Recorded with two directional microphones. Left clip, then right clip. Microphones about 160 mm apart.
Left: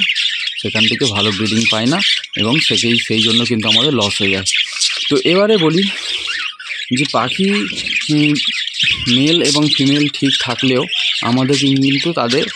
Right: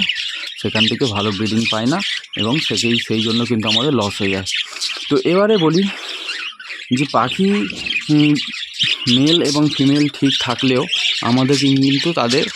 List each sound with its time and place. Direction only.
0.9 s speech: centre (ahead or behind)
6.9 s speech: centre (ahead or behind)
8.8 s bird: 90° right
9.1 s speech: 5° left (ahead or behind)
10.7 s speech: centre (ahead or behind)